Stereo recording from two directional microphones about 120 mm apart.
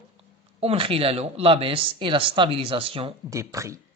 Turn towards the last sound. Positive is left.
turn(degrees=-25)  # may be behind; listen again after turning